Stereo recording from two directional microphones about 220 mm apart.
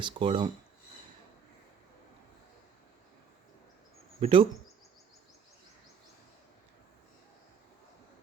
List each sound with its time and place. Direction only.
0.0 s speech: 20° right (ahead or behind)
4.2 s speech: 25° right (ahead or behind)